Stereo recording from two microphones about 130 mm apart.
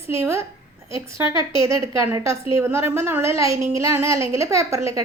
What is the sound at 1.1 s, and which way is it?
Speech, 35° left (ahead or behind).